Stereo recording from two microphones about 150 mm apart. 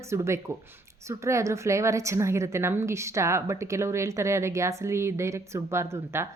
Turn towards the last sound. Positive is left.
turn(degrees=-15)  # may be behind; listen again after turning